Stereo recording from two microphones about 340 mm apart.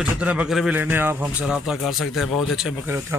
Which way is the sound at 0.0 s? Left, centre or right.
Centre.